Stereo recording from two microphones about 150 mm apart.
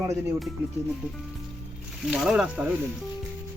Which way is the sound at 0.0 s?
20° right (ahead or behind).